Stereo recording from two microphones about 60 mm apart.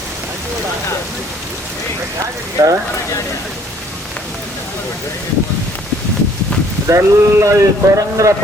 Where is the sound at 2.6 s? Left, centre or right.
Right.